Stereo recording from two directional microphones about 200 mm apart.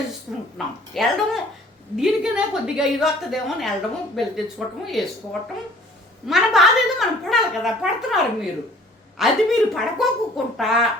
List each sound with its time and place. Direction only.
0.3 s a woman's voice: centre (ahead or behind)